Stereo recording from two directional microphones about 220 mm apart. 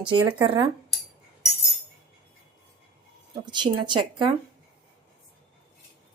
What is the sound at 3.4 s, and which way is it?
Speech, 20° right (ahead or behind).